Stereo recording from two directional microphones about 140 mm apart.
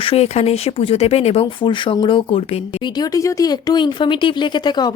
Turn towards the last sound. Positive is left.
turn(degrees=30)  # may be behind; listen again after turning